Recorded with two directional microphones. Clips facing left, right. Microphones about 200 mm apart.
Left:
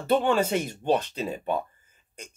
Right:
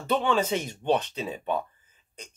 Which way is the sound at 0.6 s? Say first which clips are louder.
Left 1 dB; 5° left (ahead or behind).